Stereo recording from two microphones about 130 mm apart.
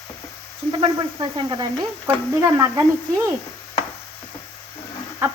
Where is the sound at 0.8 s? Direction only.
35° right (ahead or behind).